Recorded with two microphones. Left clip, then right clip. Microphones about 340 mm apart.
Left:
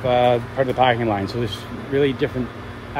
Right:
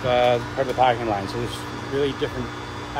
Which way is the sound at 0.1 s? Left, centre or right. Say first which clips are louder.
Left 2 dB; centre.